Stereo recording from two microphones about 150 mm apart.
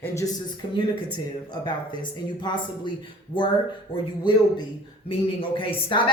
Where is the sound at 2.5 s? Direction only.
30° left (ahead or behind).